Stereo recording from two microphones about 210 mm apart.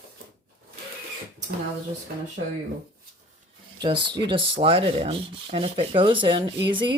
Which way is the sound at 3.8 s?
20° right (ahead or behind).